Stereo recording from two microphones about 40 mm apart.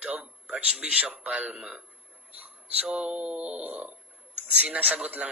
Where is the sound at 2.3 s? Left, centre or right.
Right.